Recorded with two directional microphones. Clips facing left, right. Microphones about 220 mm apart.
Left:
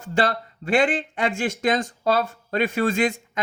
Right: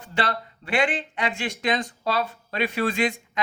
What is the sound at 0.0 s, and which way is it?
Speech, 45° left (ahead or behind).